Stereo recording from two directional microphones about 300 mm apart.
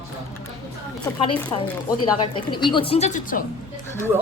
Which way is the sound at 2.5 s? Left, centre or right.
Centre.